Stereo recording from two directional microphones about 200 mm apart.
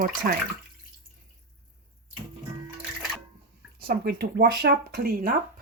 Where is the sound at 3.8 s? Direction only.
50° right (ahead or behind).